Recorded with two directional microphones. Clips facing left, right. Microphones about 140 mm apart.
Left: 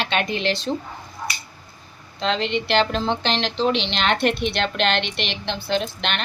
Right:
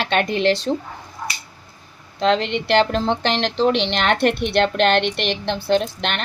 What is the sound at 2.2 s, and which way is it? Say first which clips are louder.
A woman's voice: right 4 dB; 55° right (ahead or behind).